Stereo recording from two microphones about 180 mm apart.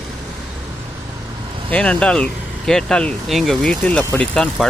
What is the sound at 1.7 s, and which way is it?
Speech, 5° left (ahead or behind).